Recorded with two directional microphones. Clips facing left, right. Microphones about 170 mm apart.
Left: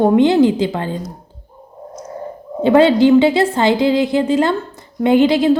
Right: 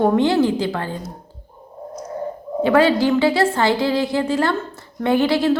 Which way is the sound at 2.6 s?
20° left (ahead or behind).